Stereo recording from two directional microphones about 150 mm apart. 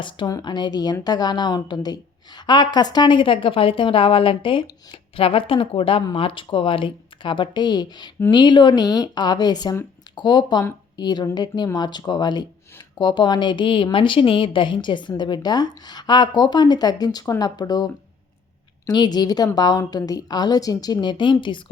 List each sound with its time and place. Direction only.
0.0 s a woman's voice: 35° left (ahead or behind)